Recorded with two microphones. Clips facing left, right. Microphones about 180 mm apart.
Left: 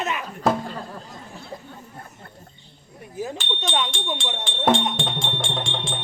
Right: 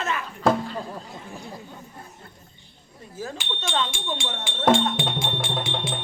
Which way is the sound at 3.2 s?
20° left (ahead or behind).